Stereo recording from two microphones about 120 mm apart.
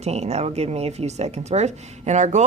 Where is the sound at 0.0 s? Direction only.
65° right (ahead or behind).